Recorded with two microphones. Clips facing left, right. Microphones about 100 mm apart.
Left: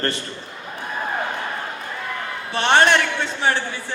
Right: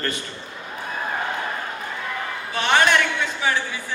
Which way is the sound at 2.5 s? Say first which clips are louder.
Left 3 dB; 35° left (ahead or behind).